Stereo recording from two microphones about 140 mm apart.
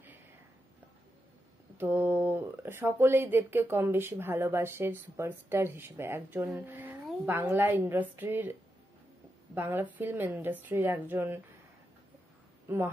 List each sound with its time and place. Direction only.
1.8 s speech: 15° right (ahead or behind)
9.6 s speech: 15° right (ahead or behind)
12.6 s a woman's voice: 15° right (ahead or behind)